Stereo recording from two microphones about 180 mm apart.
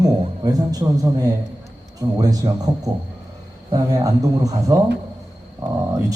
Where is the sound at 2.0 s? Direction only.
20° right (ahead or behind).